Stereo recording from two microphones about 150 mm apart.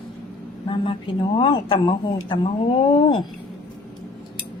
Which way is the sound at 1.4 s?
35° left (ahead or behind).